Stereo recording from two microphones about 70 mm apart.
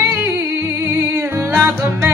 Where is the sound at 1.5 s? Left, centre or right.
Right.